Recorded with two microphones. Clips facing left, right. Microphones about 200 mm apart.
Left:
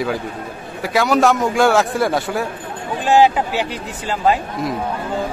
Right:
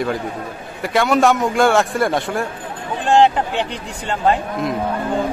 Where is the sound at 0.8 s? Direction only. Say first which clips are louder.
Even; centre (ahead or behind).